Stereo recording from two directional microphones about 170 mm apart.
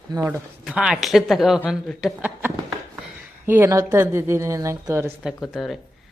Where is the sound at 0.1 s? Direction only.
25° right (ahead or behind).